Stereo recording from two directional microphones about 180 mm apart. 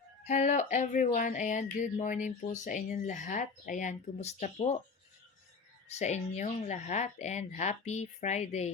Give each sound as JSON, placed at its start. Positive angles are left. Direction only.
{"t": 0.3, "sound": "speech", "side_deg": 40}
{"t": 5.9, "sound": "a woman's voice", "side_deg": 40}